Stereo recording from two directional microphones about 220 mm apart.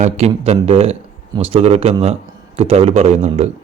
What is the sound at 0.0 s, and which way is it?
A man's voice, 30° right (ahead or behind).